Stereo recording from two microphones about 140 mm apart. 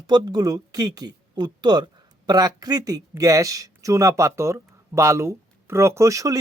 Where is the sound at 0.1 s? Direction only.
30° right (ahead or behind).